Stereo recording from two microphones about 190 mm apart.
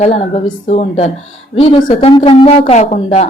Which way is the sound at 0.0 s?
35° left (ahead or behind).